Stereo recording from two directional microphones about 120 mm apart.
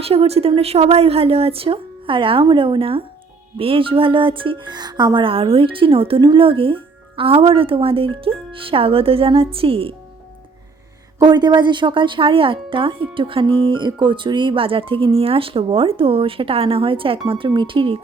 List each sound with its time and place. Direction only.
0.0 s speech: 55° right (ahead or behind)
11.2 s speech: 35° right (ahead or behind)